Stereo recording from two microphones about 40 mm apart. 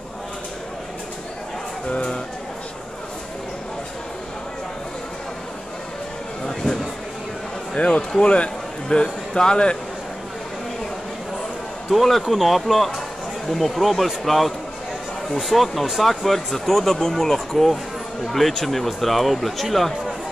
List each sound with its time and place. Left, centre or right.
1.9 s a man's voice: left
6.4 s a sound: centre
7.7 s a man's voice: left
11.9 s speech: centre